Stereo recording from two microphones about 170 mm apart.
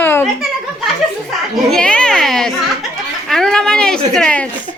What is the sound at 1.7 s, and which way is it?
A child's voice, 5° left (ahead or behind).